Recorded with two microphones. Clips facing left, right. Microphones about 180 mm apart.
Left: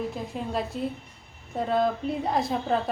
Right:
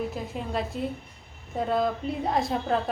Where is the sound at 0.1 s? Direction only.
Centre (ahead or behind).